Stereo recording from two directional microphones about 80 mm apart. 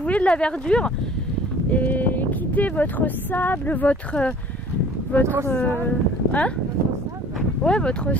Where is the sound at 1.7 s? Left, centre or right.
Left.